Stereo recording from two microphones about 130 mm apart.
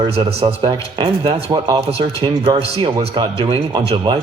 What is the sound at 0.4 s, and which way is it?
Speech, 35° right (ahead or behind).